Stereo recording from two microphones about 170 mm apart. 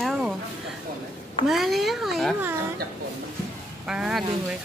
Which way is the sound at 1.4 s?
Centre (ahead or behind).